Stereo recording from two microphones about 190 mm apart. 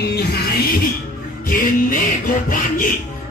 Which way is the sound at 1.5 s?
50° left (ahead or behind).